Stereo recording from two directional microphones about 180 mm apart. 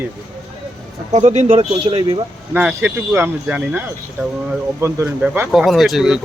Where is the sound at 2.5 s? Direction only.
10° right (ahead or behind).